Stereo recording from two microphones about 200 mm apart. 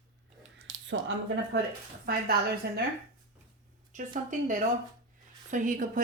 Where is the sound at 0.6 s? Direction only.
65° right (ahead or behind).